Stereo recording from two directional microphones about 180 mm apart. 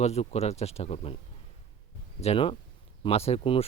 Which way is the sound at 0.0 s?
35° left (ahead or behind).